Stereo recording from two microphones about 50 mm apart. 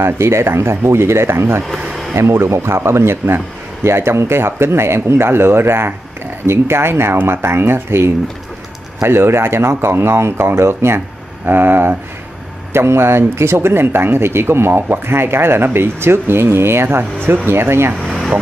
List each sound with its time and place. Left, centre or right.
0.0 s speech: right
11.4 s speech: right
12.7 s speech: right